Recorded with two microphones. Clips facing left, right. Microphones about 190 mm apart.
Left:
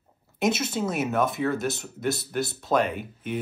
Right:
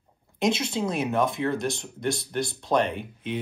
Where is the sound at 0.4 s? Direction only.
5° left (ahead or behind).